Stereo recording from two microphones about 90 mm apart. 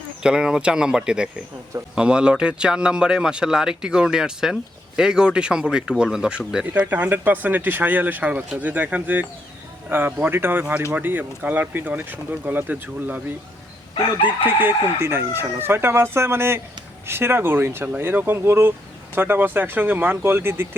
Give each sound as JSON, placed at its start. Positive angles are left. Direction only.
{"t": 0.2, "sound": "speech", "side_deg": -10}
{"t": 6.9, "sound": "speech", "side_deg": -20}
{"t": 14.4, "sound": "speech", "side_deg": -25}